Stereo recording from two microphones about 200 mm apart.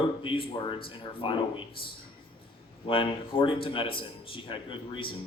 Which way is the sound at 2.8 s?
25° left (ahead or behind).